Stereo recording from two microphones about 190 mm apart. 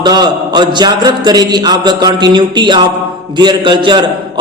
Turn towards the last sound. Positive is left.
turn(degrees=-25)  # may be behind; listen again after turning